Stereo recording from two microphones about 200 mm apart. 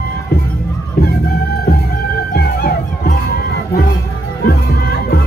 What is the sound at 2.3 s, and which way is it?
Music, 55° left (ahead or behind).